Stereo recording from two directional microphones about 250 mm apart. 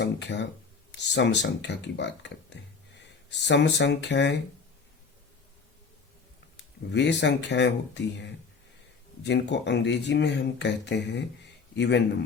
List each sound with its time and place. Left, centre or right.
0.0 s speech: left
6.9 s speech: left